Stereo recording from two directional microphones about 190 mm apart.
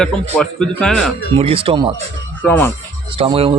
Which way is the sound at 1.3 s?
30° right (ahead or behind).